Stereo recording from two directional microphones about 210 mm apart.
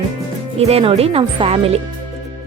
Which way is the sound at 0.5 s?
30° right (ahead or behind).